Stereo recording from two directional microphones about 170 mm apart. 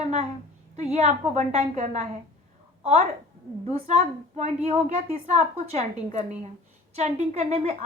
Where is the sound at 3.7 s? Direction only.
40° right (ahead or behind).